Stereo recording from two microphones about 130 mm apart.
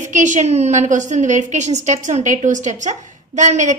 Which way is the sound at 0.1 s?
70° right (ahead or behind).